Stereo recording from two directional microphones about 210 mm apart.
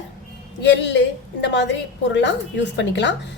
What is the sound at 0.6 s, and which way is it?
A woman's voice, 55° left (ahead or behind).